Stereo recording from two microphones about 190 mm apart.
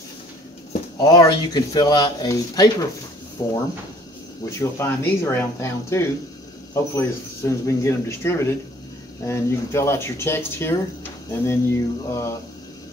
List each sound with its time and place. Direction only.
0.9 s speech: 20° left (ahead or behind)